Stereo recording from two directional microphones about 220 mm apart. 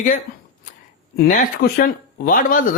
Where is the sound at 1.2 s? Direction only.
40° left (ahead or behind).